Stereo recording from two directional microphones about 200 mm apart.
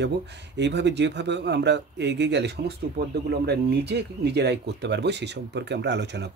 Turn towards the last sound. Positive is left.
turn(degrees=-60)  # may be behind; listen again after turning